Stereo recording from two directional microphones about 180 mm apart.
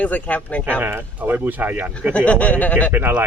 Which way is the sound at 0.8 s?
10° right (ahead or behind).